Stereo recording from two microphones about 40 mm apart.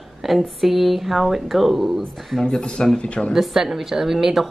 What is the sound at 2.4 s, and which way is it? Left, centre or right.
Speech, centre.